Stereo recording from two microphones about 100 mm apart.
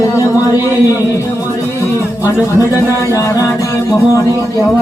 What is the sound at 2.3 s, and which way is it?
Speech, 30° left (ahead or behind).